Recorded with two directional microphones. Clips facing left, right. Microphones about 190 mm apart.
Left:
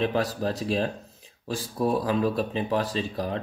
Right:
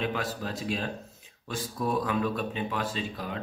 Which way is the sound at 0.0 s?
35° left (ahead or behind).